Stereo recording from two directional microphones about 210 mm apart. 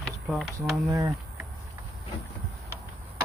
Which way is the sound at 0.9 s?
15° right (ahead or behind).